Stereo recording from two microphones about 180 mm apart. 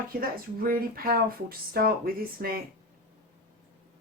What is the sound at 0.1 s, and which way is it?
Speech, 55° right (ahead or behind).